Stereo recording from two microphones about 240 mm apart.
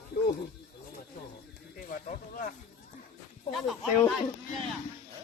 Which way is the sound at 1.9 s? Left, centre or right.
Left.